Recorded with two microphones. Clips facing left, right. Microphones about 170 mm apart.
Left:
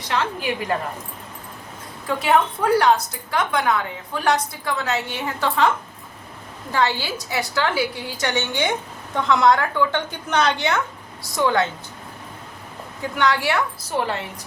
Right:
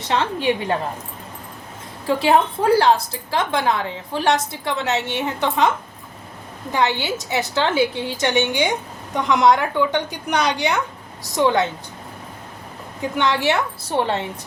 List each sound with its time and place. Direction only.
0.1 s a woman's voice: 25° right (ahead or behind)
2.0 s a woman's voice: 30° right (ahead or behind)
13.0 s a woman's voice: 20° right (ahead or behind)